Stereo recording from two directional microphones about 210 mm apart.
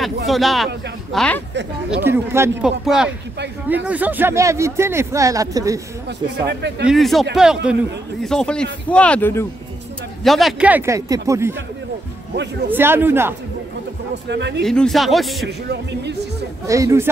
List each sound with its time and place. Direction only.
0.3 s speech: centre (ahead or behind)
2.0 s speech: 10° right (ahead or behind)
6.0 s speech: 55° right (ahead or behind)
6.9 s speech: centre (ahead or behind)
10.2 s speech: centre (ahead or behind)
12.7 s speech: 10° right (ahead or behind)
14.3 s speech: 55° right (ahead or behind)
14.6 s speech: centre (ahead or behind)
15.4 s speech: 55° right (ahead or behind)
16.6 s speech: 15° right (ahead or behind)